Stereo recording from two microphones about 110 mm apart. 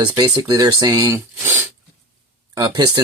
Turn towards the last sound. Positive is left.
turn(degrees=-45)  # may be behind; listen again after turning